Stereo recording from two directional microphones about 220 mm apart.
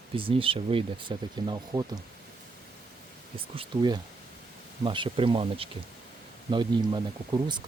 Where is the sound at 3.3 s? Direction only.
20° right (ahead or behind).